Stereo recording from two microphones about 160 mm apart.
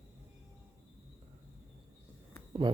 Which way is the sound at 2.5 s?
30° right (ahead or behind).